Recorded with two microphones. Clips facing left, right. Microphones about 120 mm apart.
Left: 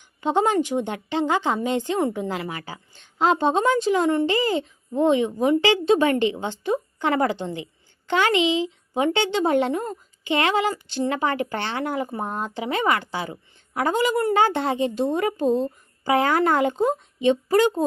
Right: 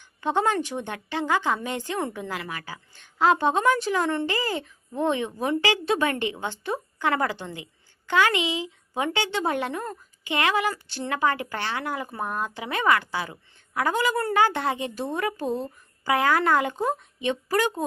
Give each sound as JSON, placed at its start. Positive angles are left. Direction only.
{"t": 0.2, "sound": "a woman's voice", "side_deg": 15}